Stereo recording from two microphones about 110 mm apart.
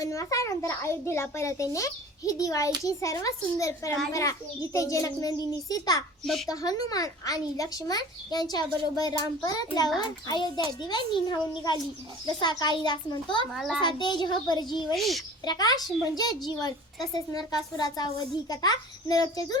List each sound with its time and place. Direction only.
0.0 s a child's voice: 30° left (ahead or behind)
6.2 s a child's voice: centre (ahead or behind)
6.5 s a child's voice: 35° left (ahead or behind)
13.5 s a child's voice: centre (ahead or behind)
13.8 s a child's voice: 45° left (ahead or behind)
14.9 s a child's voice: centre (ahead or behind)
15.4 s a child's voice: 35° left (ahead or behind)